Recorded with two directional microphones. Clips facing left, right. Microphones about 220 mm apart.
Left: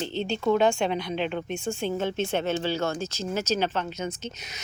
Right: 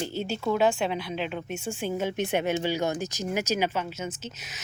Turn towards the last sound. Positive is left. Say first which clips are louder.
# left 3 dB
turn(degrees=-5)  # may be behind; listen again after turning